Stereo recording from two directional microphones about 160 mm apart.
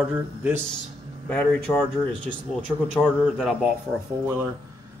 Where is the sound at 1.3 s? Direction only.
15° left (ahead or behind).